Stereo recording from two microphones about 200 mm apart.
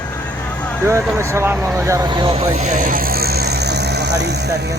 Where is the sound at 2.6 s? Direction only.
40° right (ahead or behind).